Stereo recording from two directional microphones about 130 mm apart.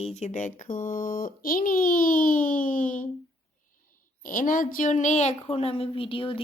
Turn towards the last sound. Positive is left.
turn(degrees=40)  # may be behind; listen again after turning